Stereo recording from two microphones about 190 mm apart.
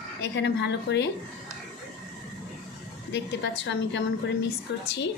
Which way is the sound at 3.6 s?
70° left (ahead or behind).